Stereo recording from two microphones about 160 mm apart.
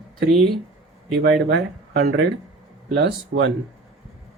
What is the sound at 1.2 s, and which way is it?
Speech, 90° right.